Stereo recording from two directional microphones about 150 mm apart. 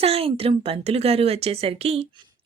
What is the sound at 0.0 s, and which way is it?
A woman's voice, 40° right (ahead or behind).